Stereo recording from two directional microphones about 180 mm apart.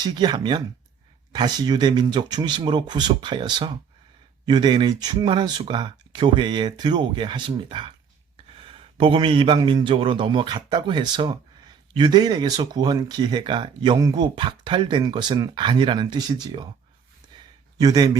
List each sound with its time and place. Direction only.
0.0 s speech: 25° right (ahead or behind)
17.3 s a sound: 25° right (ahead or behind)
17.7 s speech: 20° right (ahead or behind)